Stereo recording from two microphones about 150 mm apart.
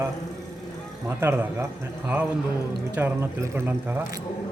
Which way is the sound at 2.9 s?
15° right (ahead or behind).